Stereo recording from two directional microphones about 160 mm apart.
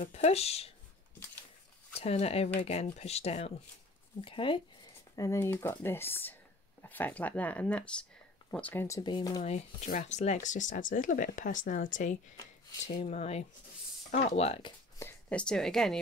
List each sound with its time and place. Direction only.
0.0 s speech: 40° left (ahead or behind)
2.0 s speech: 40° left (ahead or behind)
5.1 s speech: 20° left (ahead or behind)
9.4 s speech: 40° left (ahead or behind)
12.9 s speech: 40° left (ahead or behind)
15.0 s a woman's voice: 10° left (ahead or behind)